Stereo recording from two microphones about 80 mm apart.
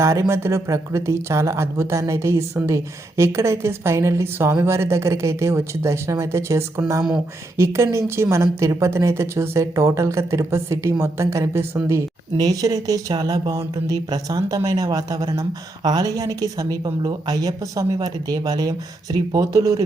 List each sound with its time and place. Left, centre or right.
0.0 s speech: right
12.4 s speech: right